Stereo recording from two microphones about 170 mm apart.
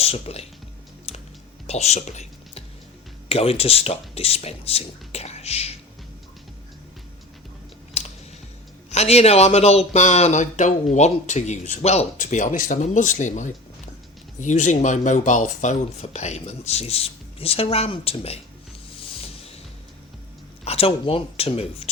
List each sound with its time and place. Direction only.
0.0 s speech: 35° left (ahead or behind)
1.6 s speech: 40° left (ahead or behind)
8.0 s typing: 40° left (ahead or behind)
8.9 s speech: 40° left (ahead or behind)
19.2 s music: 35° left (ahead or behind)
20.7 s speech: 35° left (ahead or behind)